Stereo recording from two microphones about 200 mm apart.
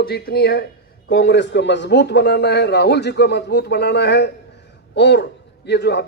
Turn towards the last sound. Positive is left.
turn(degrees=55)  # may be behind; listen again after turning